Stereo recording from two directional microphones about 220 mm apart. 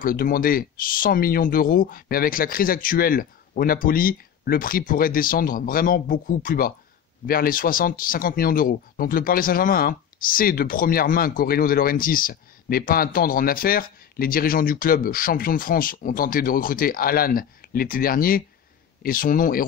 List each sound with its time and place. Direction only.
0.0 s speech: 40° left (ahead or behind)